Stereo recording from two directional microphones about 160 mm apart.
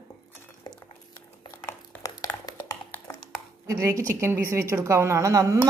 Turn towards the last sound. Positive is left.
turn(degrees=-20)  # may be behind; listen again after turning